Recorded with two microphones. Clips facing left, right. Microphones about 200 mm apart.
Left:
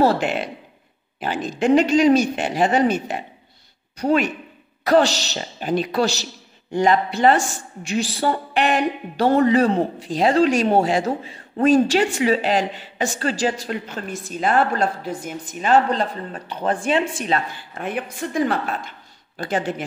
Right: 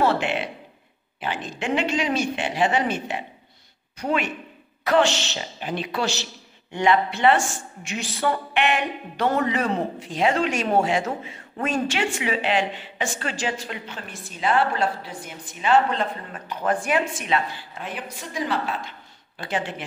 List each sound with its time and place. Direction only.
0.0 s a woman's voice: 40° left (ahead or behind)
17.7 s a woman's voice: 55° left (ahead or behind)